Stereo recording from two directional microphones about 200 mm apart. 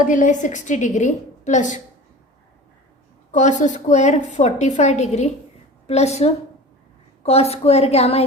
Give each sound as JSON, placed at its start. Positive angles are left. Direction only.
{"t": 0.0, "sound": "a woman's voice", "side_deg": 40}
{"t": 3.3, "sound": "a woman's voice", "side_deg": 35}